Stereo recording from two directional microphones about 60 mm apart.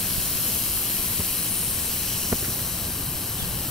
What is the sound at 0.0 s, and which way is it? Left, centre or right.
Steam, centre.